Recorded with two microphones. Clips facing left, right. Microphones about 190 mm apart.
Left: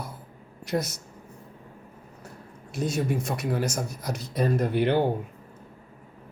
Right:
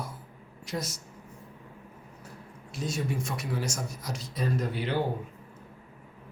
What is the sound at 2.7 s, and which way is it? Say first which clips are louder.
Speech: left 5 dB; 60° left (ahead or behind).